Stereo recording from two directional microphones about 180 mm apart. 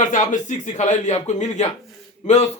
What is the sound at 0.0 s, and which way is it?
Speech, 45° left (ahead or behind).